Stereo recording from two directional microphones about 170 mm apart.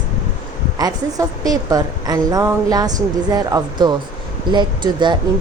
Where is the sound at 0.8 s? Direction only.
20° right (ahead or behind).